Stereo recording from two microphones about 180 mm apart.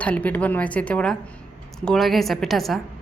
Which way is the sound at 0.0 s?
10° left (ahead or behind).